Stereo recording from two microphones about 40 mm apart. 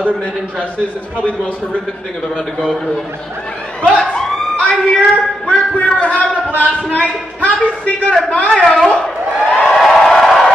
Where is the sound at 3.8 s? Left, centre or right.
Left.